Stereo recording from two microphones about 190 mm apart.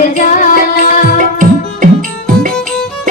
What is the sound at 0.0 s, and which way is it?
Music, 45° left (ahead or behind).